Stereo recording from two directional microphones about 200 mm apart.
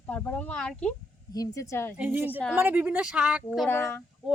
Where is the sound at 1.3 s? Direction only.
15° left (ahead or behind).